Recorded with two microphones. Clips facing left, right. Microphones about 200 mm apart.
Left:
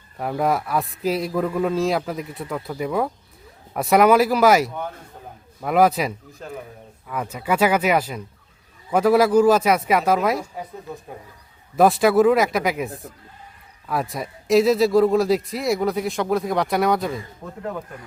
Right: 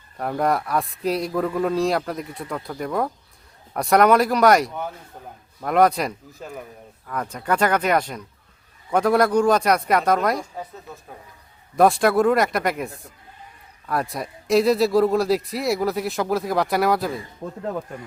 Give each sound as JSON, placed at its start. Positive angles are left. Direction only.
{"t": 0.2, "sound": "a man's voice", "side_deg": 0}
{"t": 11.8, "sound": "a man's voice", "side_deg": 0}
{"t": 17.4, "sound": "speech", "side_deg": -30}